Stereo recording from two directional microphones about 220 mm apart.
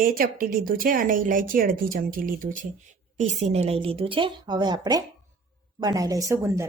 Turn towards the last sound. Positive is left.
turn(degrees=-15)  # may be behind; listen again after turning